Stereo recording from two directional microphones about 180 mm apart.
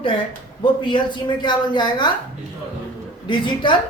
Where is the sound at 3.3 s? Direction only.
25° left (ahead or behind).